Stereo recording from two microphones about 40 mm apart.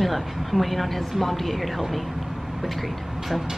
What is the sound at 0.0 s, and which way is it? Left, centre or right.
A woman's voice, centre.